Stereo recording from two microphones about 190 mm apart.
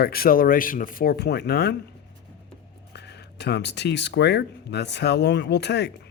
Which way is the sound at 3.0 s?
60° left (ahead or behind).